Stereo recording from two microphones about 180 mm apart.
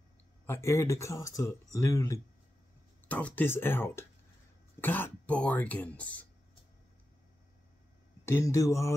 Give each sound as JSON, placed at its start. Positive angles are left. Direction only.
{"t": 0.5, "sound": "speech", "side_deg": 15}
{"t": 8.3, "sound": "speech", "side_deg": 15}